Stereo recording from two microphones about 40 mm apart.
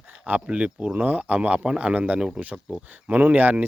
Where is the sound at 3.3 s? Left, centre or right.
Right.